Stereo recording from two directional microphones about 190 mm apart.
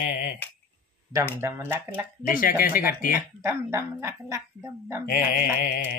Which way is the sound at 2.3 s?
50° left (ahead or behind).